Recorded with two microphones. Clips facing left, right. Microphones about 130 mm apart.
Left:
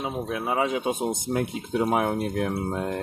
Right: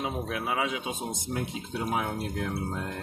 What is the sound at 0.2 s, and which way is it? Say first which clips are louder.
Speech: left 8 dB; 25° left (ahead or behind).